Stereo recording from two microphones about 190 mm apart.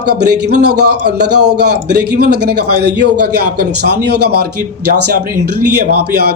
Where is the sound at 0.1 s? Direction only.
60° right (ahead or behind).